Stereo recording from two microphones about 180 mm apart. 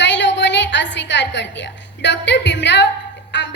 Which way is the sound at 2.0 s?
80° left.